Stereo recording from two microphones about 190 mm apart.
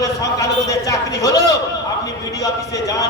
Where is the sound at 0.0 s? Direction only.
20° left (ahead or behind).